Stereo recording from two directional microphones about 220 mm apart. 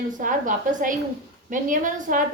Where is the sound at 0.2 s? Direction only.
35° right (ahead or behind).